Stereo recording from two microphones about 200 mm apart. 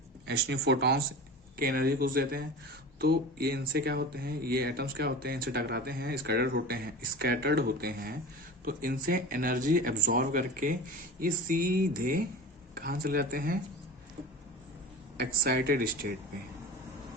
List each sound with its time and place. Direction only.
0.3 s speech: 55° right (ahead or behind)
15.2 s speech: 50° right (ahead or behind)